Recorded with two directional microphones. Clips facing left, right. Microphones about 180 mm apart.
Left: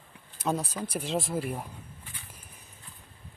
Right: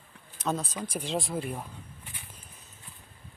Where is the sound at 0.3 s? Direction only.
10° left (ahead or behind).